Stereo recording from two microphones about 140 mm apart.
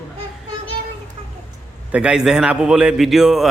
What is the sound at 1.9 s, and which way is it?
Speech, 5° right (ahead or behind).